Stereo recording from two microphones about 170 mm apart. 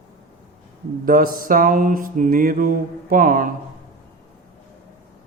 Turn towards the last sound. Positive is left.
turn(degrees=-55)  # may be behind; listen again after turning